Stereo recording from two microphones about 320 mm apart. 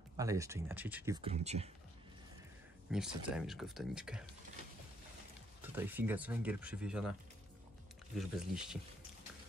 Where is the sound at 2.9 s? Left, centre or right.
Centre.